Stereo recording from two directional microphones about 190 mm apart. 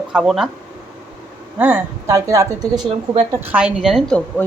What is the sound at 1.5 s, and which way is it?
A woman's voice, 10° right (ahead or behind).